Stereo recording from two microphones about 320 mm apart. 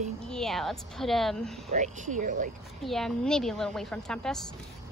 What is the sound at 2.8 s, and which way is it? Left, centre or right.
A woman's voice, centre.